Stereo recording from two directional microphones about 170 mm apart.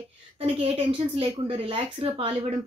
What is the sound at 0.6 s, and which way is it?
A woman's voice, 35° right (ahead or behind).